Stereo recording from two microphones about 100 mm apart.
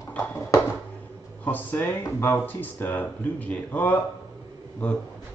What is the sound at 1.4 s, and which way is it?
Speech, 20° left (ahead or behind).